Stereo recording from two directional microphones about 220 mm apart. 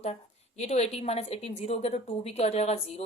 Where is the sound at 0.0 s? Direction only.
30° left (ahead or behind).